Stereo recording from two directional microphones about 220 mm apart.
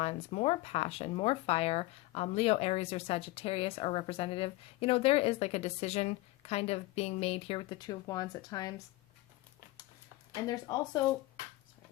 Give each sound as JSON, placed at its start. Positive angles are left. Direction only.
{"t": 0.0, "sound": "speech", "side_deg": 30}
{"t": 10.4, "sound": "speech", "side_deg": 15}